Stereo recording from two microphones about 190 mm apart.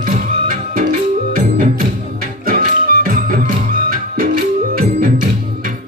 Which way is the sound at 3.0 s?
45° right (ahead or behind).